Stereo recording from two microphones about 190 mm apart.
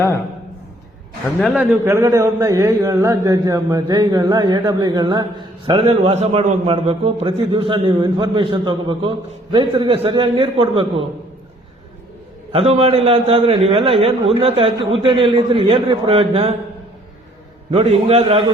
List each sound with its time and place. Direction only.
1.4 s a man's voice: 5° right (ahead or behind); by 5.2 s 20° right (ahead or behind)
5.8 s a man's voice: 35° right (ahead or behind)
12.5 s a man's voice: 30° right (ahead or behind)
17.7 s a man's voice: 35° right (ahead or behind)